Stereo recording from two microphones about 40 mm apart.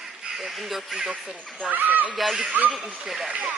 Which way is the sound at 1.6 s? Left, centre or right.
Right.